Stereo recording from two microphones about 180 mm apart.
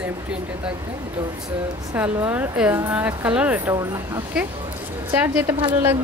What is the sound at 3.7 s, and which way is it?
A woman's voice, 20° right (ahead or behind).